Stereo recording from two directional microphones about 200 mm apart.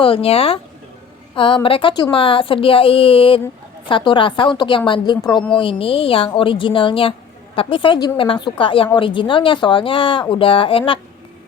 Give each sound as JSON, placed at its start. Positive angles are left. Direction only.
{"t": 0.0, "sound": "a woman's voice", "side_deg": 30}